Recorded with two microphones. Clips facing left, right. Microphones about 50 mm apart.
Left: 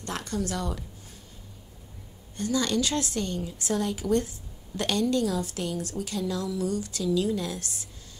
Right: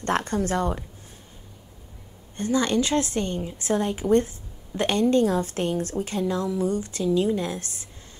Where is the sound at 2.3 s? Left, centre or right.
Right.